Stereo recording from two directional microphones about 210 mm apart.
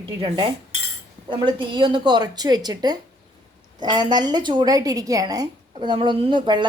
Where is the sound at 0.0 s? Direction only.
25° right (ahead or behind).